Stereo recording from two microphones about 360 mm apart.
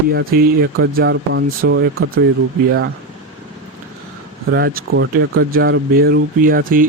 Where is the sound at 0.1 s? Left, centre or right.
Right.